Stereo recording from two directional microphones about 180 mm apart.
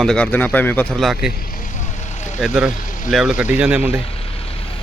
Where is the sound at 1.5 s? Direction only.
45° left (ahead or behind).